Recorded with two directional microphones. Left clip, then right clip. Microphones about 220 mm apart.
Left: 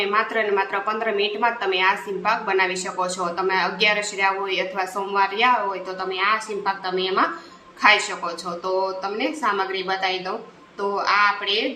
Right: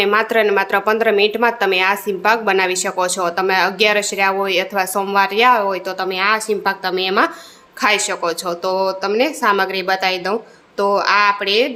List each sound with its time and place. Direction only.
0.0 s speech: 55° right (ahead or behind)